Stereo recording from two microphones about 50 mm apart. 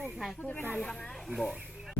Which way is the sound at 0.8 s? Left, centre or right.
Centre.